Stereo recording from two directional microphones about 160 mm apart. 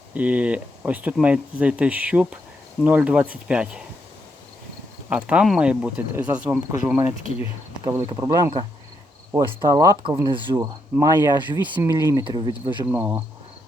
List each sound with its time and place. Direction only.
0.1 s speech: 10° right (ahead or behind)
5.0 s speech: 10° right (ahead or behind)
9.6 s speech: 20° right (ahead or behind)
12.9 s speech: 10° right (ahead or behind)